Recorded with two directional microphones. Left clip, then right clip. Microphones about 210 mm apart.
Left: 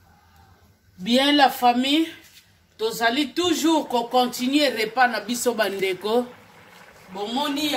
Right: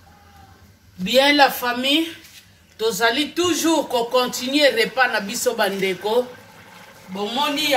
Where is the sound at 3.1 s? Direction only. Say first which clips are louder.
Even; 45° left (ahead or behind).